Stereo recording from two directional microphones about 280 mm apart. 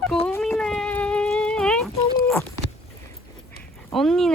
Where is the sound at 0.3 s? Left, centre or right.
Centre.